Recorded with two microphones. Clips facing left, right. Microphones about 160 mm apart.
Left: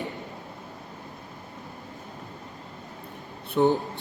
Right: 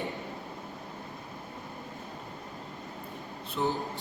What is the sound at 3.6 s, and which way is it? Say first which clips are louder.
Speech: left 9 dB; 60° left (ahead or behind).